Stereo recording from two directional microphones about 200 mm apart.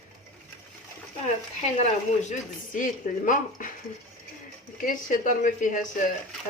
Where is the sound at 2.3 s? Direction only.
40° left (ahead or behind).